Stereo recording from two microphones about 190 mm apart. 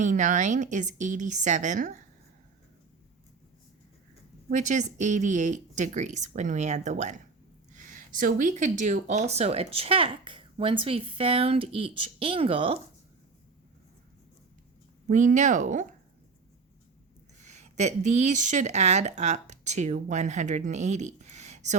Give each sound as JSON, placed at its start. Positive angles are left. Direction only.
{"t": 0.0, "sound": "speech", "side_deg": -40}
{"t": 4.4, "sound": "speech", "side_deg": -40}
{"t": 15.1, "sound": "speech", "side_deg": -40}
{"t": 17.4, "sound": "speech", "side_deg": -35}